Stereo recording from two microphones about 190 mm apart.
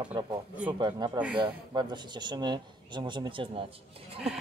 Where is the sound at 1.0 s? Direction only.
25° right (ahead or behind).